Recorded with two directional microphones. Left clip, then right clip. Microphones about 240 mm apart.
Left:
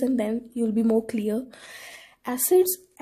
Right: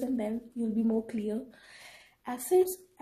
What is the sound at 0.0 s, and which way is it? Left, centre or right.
Speech, left.